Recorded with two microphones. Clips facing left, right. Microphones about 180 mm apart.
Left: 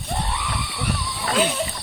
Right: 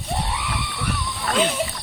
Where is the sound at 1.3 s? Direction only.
5° left (ahead or behind).